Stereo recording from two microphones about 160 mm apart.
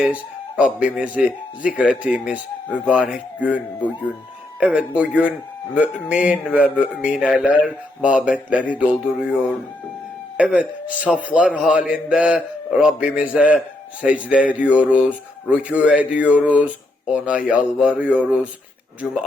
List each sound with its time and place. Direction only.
0.0 s speech: 5° right (ahead or behind)
4.6 s speech: 10° right (ahead or behind)
10.3 s speech: 10° right (ahead or behind)